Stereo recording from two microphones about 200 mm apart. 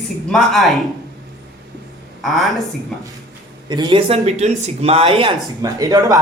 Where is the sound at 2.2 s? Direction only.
Centre (ahead or behind).